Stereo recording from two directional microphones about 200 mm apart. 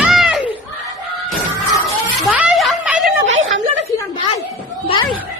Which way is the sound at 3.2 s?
70° right (ahead or behind).